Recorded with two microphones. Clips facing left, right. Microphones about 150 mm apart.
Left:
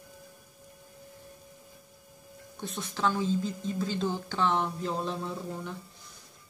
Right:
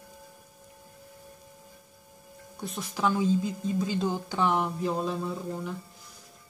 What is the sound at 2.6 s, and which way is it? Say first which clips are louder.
A woman's voice: right 2 dB; 10° right (ahead or behind).